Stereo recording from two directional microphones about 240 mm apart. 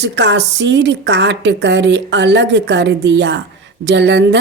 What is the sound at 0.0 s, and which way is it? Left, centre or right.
A woman's voice, right.